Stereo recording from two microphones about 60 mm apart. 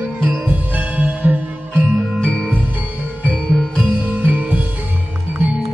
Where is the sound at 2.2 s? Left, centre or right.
Centre.